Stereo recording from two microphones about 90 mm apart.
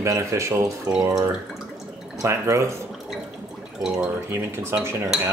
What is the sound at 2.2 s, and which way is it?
Speech, 35° right (ahead or behind).